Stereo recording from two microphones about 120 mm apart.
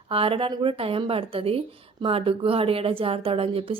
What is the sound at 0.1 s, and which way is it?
Speech, 50° right (ahead or behind).